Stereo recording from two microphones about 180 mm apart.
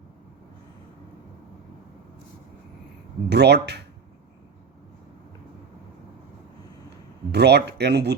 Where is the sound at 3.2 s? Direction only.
70° right (ahead or behind).